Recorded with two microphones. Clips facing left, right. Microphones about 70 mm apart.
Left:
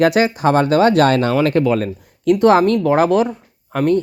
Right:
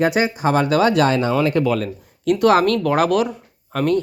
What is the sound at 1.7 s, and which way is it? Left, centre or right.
Speech, left.